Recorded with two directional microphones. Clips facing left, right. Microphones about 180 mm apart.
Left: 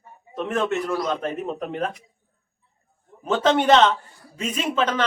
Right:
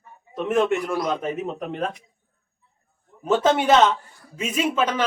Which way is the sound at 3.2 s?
10° right (ahead or behind).